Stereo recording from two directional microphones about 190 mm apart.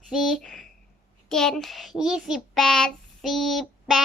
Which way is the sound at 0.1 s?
Centre (ahead or behind).